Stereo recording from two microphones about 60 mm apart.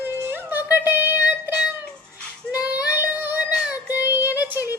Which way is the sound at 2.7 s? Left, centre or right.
Left.